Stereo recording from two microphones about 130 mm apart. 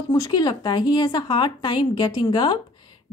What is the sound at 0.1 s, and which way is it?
Speech, 30° left (ahead or behind).